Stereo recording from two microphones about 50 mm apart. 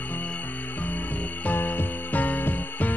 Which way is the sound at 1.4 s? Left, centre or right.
Left.